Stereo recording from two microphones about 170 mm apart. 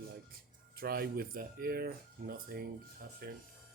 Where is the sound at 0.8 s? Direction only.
60° right (ahead or behind).